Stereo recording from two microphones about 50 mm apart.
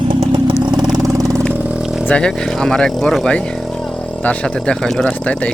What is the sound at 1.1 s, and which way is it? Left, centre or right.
Vehicle, right.